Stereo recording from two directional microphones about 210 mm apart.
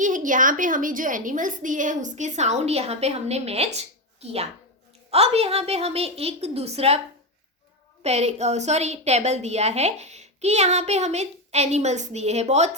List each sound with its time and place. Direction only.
0.0 s a woman's voice: 40° right (ahead or behind)
8.0 s a woman's voice: 30° right (ahead or behind)